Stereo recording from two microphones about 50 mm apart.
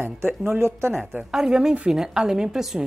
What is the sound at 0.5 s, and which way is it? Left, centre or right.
Speech, right.